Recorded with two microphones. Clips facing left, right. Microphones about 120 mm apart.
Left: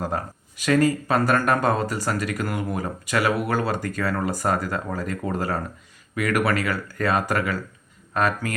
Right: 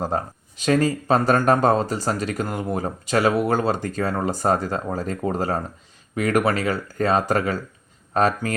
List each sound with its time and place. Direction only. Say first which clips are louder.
0.0 s speech: right 3 dB; 25° right (ahead or behind)